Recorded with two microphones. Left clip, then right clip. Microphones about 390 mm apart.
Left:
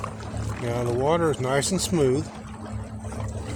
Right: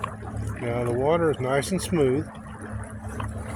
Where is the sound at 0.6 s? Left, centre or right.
Right.